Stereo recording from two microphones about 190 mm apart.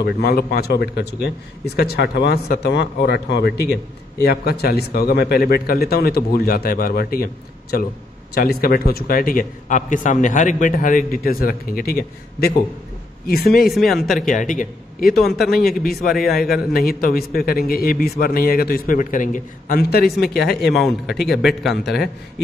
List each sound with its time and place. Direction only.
0.0 s a man's voice: 55° left (ahead or behind)
8.4 s a man's voice: 50° left (ahead or behind)
13.7 s a man's voice: centre (ahead or behind)
14.2 s a man's voice: 45° left (ahead or behind)
15.2 s a man's voice: centre (ahead or behind)
16.7 s a man's voice: 50° left (ahead or behind)
20.6 s a man's voice: centre (ahead or behind)